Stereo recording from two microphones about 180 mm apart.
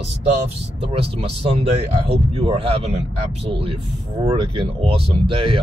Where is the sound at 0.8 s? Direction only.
30° right (ahead or behind).